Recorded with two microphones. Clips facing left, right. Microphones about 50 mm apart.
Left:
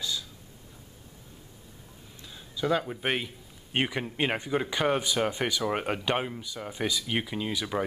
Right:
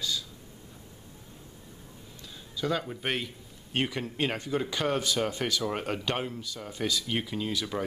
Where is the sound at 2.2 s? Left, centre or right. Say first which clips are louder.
Left 2 dB; centre.